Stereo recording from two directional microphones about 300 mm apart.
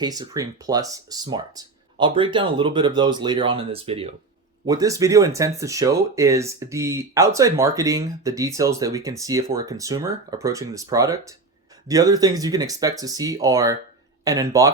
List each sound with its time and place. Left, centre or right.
0.0 s speech: centre